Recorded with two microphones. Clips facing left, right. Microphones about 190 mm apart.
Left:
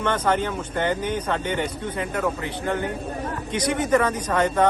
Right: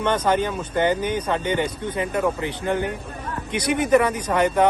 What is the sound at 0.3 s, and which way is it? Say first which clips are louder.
Speech: right 2 dB; 15° right (ahead or behind).